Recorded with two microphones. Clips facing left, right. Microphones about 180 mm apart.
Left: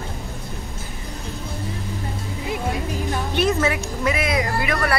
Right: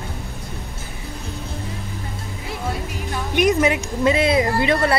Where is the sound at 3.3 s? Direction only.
15° right (ahead or behind).